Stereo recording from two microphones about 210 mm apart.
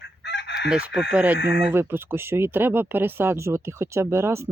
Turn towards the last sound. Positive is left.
turn(degrees=-15)  # may be behind; listen again after turning